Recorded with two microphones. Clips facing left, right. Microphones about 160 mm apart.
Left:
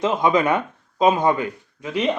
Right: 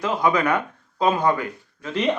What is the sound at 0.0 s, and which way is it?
A man's voice, 20° left (ahead or behind).